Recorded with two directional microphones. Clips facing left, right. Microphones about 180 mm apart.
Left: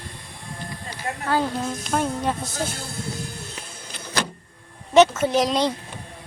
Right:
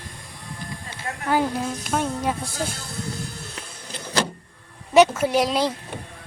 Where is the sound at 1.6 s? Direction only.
Centre (ahead or behind).